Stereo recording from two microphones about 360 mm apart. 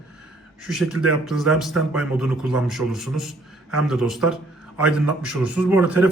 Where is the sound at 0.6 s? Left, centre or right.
Centre.